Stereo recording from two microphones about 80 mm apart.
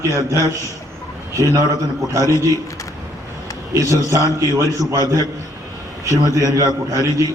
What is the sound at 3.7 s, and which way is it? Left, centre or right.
A man's voice, right.